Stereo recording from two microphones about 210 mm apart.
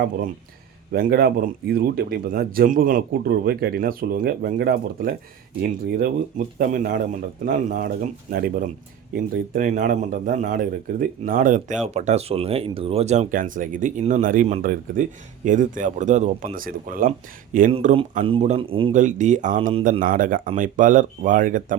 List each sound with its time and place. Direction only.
0.9 s a man's voice: 45° right (ahead or behind)
17.7 s a man's voice: 25° right (ahead or behind)